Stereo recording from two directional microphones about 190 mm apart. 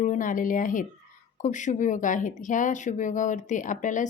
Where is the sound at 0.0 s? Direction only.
45° left (ahead or behind).